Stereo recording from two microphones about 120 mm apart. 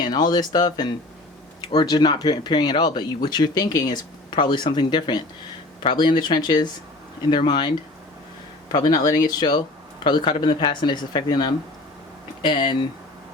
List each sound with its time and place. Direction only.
0.0 s speech: 35° left (ahead or behind)
8.7 s speech: 30° left (ahead or behind)